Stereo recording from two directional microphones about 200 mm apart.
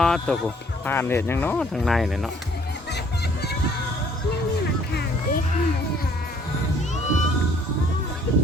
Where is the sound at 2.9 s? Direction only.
55° left (ahead or behind).